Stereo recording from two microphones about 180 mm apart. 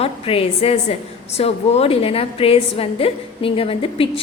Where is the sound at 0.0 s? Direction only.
30° left (ahead or behind).